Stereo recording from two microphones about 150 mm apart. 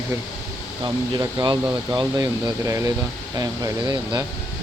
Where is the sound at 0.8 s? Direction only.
25° right (ahead or behind).